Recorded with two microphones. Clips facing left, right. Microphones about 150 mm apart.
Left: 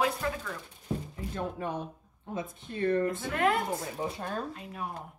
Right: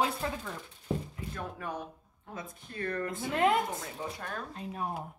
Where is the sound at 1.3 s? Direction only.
25° left (ahead or behind).